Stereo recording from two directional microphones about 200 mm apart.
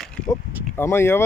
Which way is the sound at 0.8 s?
10° left (ahead or behind).